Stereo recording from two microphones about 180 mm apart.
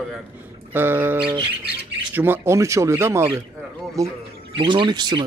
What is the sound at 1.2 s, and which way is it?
Speech, 25° right (ahead or behind).